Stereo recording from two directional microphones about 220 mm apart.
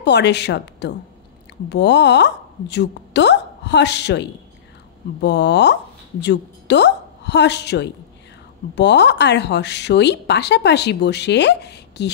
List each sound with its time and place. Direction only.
0.0 s a woman's voice: 50° left (ahead or behind)